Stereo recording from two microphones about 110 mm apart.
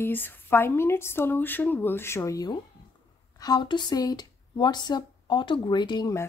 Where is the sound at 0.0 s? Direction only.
15° left (ahead or behind); by 6.1 s 40° left (ahead or behind).